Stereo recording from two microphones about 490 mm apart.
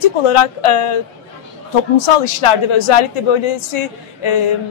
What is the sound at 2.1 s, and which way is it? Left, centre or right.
A woman's voice, left.